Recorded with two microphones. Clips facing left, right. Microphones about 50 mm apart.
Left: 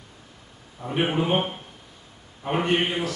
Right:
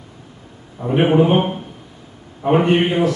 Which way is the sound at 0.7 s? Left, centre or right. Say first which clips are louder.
Right 10 dB; right.